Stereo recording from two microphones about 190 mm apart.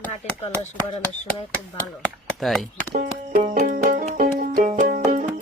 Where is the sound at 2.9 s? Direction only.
45° right (ahead or behind).